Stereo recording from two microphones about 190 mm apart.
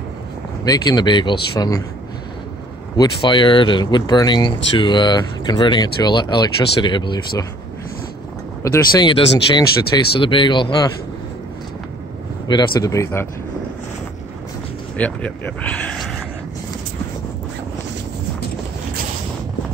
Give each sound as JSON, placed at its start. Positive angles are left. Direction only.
{"t": 0.7, "sound": "speech", "side_deg": 20}
{"t": 3.0, "sound": "speech", "side_deg": 25}
{"t": 8.7, "sound": "speech", "side_deg": 25}
{"t": 12.4, "sound": "speech", "side_deg": 20}
{"t": 15.0, "sound": "speech", "side_deg": 5}